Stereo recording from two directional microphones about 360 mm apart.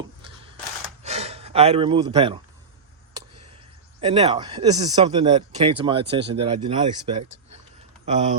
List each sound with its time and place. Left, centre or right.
0.2 s a sound: centre
1.0 s speech: centre
4.0 s speech: centre